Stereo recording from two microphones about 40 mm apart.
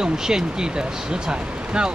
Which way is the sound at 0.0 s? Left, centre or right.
Centre.